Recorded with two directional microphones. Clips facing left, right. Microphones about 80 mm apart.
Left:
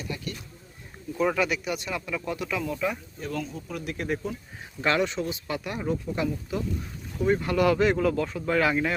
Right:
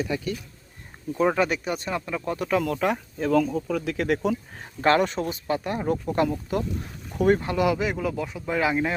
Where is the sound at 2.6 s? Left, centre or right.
Right.